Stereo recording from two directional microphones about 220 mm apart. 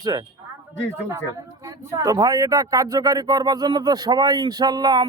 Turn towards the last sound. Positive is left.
turn(degrees=-15)  # may be behind; listen again after turning